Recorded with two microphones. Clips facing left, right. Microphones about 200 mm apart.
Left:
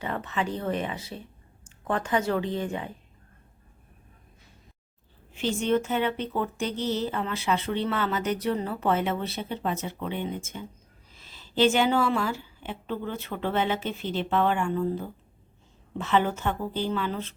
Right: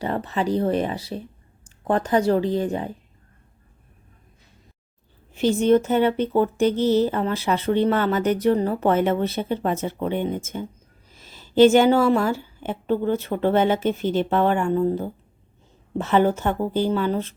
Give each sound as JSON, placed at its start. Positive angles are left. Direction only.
{"t": 0.0, "sound": "speech", "side_deg": -35}
{"t": 5.6, "sound": "a woman's voice", "side_deg": -40}